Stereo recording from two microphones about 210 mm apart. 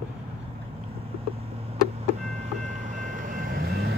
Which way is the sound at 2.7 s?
35° right (ahead or behind).